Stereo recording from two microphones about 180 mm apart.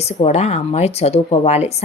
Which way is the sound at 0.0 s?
35° left (ahead or behind).